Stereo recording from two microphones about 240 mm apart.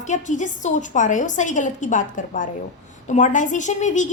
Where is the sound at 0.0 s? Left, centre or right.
Left.